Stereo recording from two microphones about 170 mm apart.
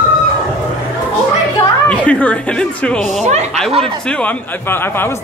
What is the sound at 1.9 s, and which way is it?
A man's voice, 10° left (ahead or behind).